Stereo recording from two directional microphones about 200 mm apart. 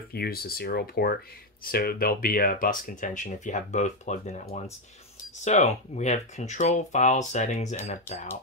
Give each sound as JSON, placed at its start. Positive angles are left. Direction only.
{"t": 0.1, "sound": "speech", "side_deg": 50}